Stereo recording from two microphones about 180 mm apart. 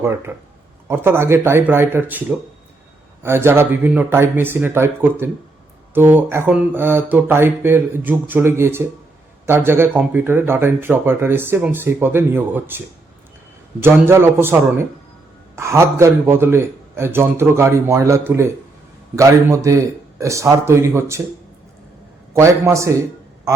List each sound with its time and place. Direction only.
0.9 s speech: 15° right (ahead or behind)
3.2 s speech: 15° right (ahead or behind)
13.8 s speech: 15° right (ahead or behind)
22.3 s speech: 15° right (ahead or behind)